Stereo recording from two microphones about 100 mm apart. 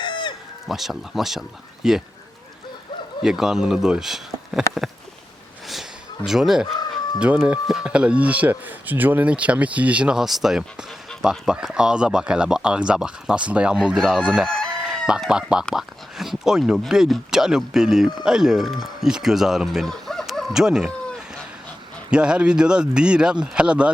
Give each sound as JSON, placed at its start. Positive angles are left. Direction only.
{"t": 0.0, "sound": "chicken", "side_deg": 50}
{"t": 0.7, "sound": "speech", "side_deg": 0}
{"t": 3.2, "sound": "speech", "side_deg": -5}
{"t": 6.2, "sound": "speech", "side_deg": -5}
{"t": 14.4, "sound": "chicken", "side_deg": 5}
{"t": 14.8, "sound": "chicken", "side_deg": -10}
{"t": 15.3, "sound": "speech", "side_deg": -5}
{"t": 22.1, "sound": "speech", "side_deg": -10}